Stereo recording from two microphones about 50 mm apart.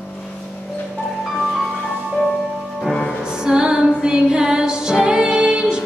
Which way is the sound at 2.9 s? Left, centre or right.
Centre.